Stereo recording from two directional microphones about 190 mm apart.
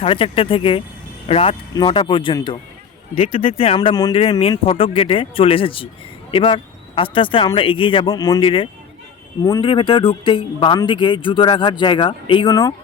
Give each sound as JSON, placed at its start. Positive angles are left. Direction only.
{"t": 0.0, "sound": "speech", "side_deg": 30}